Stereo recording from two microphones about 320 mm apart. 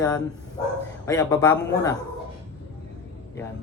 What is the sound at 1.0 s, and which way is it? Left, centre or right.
Speech, centre.